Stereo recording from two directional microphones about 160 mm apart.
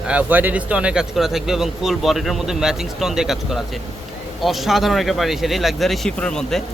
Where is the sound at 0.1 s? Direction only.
10° right (ahead or behind).